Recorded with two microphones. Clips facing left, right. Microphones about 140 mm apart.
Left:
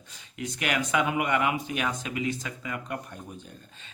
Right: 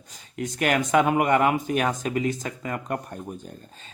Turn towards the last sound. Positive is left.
turn(degrees=-45)  # may be behind; listen again after turning